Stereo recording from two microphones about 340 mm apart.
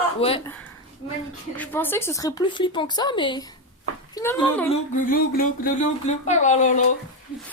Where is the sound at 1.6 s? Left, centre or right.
Centre.